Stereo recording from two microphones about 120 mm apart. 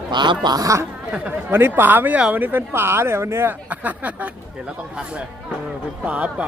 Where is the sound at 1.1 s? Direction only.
15° right (ahead or behind).